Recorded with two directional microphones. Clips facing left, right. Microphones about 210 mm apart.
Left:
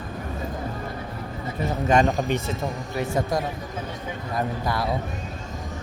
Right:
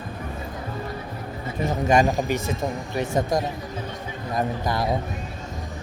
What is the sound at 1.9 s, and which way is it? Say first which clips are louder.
Speech: even; 10° right (ahead or behind).